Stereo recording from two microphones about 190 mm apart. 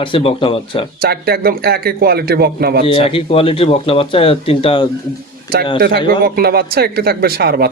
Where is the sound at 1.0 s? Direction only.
55° right (ahead or behind).